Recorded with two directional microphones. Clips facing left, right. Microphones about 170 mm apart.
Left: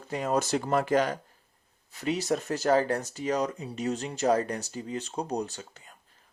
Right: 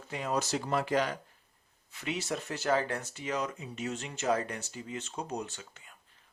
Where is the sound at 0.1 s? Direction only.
45° left (ahead or behind).